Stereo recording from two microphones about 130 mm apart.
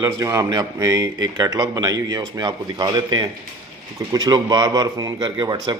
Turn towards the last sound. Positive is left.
turn(degrees=-35)  # may be behind; listen again after turning